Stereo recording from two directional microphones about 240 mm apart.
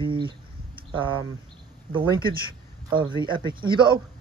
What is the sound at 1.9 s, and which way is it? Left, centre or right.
Speech, right.